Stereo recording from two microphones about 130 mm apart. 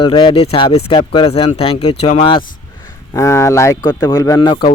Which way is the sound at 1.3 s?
50° left (ahead or behind).